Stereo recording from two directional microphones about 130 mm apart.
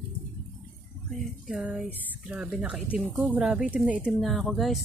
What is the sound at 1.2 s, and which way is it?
Speech, 5° right (ahead or behind).